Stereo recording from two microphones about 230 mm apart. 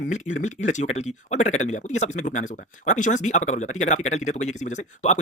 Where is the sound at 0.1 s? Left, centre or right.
Left.